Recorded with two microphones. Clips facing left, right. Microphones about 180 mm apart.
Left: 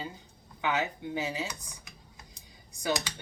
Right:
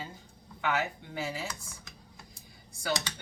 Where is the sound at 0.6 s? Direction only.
20° left (ahead or behind).